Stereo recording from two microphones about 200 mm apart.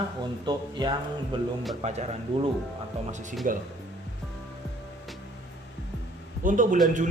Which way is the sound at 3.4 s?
40° right (ahead or behind).